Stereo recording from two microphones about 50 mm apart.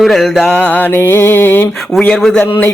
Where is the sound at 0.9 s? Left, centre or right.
Left.